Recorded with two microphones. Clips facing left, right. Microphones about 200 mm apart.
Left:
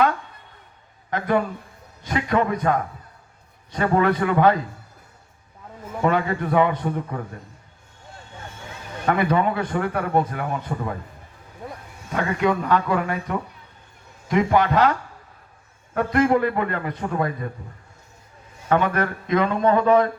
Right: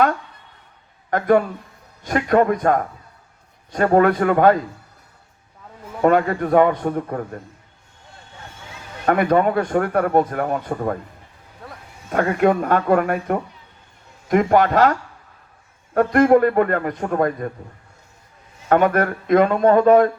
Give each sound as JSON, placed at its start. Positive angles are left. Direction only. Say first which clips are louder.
{"t": 1.1, "sound": "a man's voice", "louder": "right 5 dB", "side_deg": -50}
{"t": 6.0, "sound": "a man's voice", "louder": "right 5 dB", "side_deg": -50}
{"t": 9.0, "sound": "a man's voice", "louder": "right 4 dB", "side_deg": -45}
{"t": 12.1, "sound": "a man's voice", "louder": "right 5 dB", "side_deg": -50}
{"t": 16.0, "sound": "a man's voice", "louder": "right 5 dB", "side_deg": -45}
{"t": 18.7, "sound": "a man's voice", "louder": "right 4 dB", "side_deg": -50}